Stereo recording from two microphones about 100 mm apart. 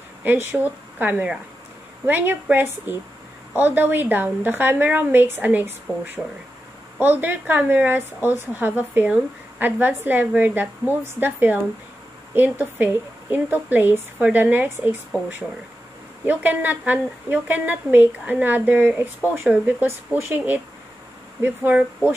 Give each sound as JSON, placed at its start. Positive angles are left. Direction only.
{"t": 0.2, "sound": "a woman's voice", "side_deg": -20}